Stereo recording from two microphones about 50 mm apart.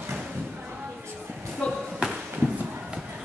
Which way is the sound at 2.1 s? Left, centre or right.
Centre.